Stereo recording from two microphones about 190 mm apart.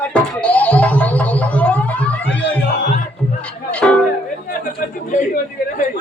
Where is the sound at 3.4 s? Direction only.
5° left (ahead or behind).